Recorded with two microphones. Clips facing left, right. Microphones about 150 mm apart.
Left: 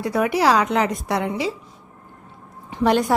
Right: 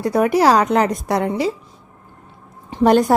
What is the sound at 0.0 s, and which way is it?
A woman's voice, 40° right (ahead or behind).